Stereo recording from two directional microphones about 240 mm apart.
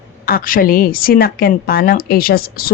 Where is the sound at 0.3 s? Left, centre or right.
Left.